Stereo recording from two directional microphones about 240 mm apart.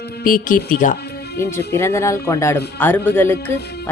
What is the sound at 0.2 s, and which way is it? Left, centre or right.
Speech, left.